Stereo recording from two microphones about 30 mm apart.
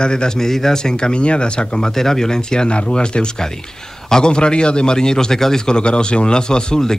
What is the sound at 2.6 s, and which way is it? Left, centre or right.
Speech, left.